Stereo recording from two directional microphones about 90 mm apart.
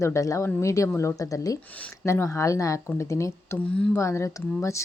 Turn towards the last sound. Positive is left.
turn(degrees=35)  # may be behind; listen again after turning